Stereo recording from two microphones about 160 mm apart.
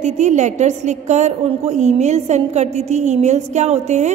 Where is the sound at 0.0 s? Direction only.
45° right (ahead or behind).